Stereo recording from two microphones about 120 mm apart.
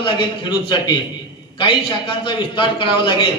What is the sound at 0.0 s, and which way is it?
A man's voice, 40° left (ahead or behind).